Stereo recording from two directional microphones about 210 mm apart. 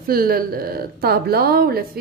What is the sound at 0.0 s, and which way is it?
A woman's voice, 45° right (ahead or behind).